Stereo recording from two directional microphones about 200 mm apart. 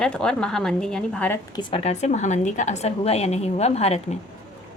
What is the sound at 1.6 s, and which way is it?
A woman's voice, 25° left (ahead or behind).